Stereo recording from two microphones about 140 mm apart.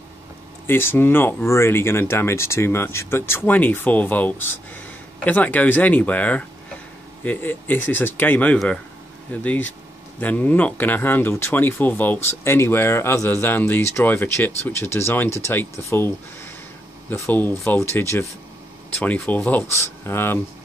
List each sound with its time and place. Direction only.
0.7 s speech: 15° left (ahead or behind)
17.1 s speech: 15° left (ahead or behind)